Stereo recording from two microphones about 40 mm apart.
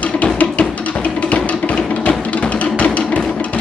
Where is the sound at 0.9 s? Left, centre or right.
Left.